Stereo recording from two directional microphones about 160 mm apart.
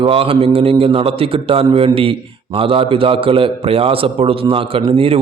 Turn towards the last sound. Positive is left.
turn(degrees=-35)  # may be behind; listen again after turning